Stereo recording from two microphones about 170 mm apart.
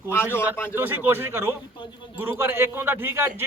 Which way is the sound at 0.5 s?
15° left (ahead or behind).